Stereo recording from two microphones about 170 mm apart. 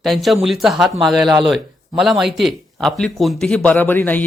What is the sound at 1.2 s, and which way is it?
Speech, 25° right (ahead or behind).